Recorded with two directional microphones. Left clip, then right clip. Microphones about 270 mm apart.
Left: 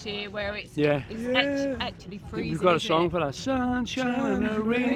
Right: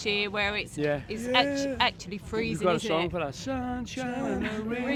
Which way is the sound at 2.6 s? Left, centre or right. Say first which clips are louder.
Left 5 dB; left.